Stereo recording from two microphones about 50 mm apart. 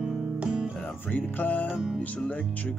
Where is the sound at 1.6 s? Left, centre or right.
Centre.